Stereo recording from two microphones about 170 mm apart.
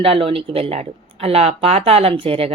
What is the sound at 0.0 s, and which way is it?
Speech, 35° right (ahead or behind).